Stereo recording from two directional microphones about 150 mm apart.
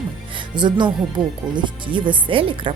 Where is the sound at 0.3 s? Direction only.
30° right (ahead or behind).